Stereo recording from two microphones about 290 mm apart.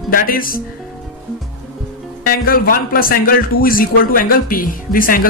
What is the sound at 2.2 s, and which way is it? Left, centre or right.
A man's voice, left.